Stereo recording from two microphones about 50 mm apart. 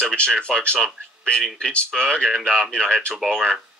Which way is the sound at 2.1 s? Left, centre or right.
Centre.